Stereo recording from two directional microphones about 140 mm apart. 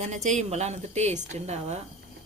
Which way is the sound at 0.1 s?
60° right (ahead or behind).